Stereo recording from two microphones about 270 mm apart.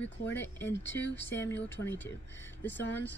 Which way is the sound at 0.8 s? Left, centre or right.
Left.